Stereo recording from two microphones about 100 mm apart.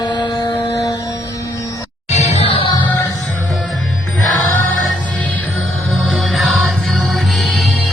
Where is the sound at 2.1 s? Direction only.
80° left.